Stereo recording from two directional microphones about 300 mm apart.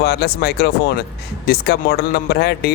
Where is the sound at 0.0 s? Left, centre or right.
Left.